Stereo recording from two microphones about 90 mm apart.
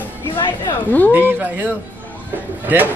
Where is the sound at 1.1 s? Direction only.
20° right (ahead or behind).